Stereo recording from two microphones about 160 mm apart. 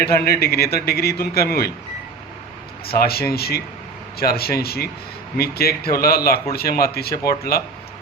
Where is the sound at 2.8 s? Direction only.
75° left (ahead or behind).